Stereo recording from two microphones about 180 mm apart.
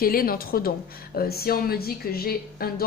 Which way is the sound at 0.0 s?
55° left (ahead or behind).